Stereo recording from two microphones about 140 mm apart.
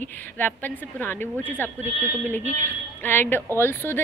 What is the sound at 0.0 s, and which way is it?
A woman's voice, 15° left (ahead or behind).